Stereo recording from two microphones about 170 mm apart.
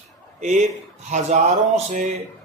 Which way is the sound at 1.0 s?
45° right (ahead or behind).